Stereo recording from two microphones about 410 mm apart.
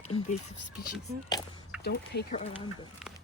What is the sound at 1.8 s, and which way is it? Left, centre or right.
Speech, left.